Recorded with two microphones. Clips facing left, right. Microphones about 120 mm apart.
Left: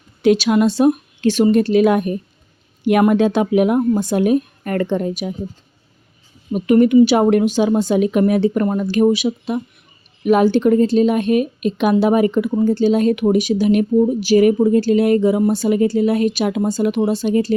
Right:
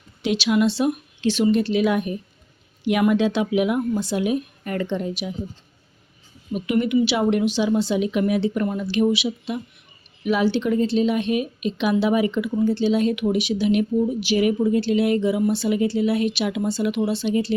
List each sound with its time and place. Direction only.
0.2 s a woman's voice: 45° left (ahead or behind)
6.5 s a woman's voice: 40° left (ahead or behind)